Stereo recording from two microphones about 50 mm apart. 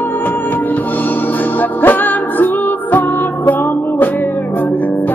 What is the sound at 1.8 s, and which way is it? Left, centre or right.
Music, left.